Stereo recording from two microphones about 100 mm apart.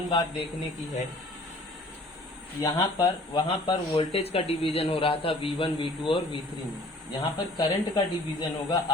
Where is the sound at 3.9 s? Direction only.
85° left; by 8.8 s 45° left (ahead or behind).